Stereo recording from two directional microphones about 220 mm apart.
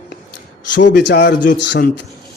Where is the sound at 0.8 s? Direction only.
50° left (ahead or behind).